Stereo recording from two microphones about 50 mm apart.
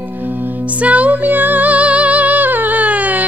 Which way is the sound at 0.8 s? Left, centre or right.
Right.